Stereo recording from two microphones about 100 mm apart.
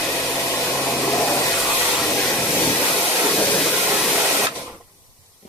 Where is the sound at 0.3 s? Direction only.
20° left (ahead or behind).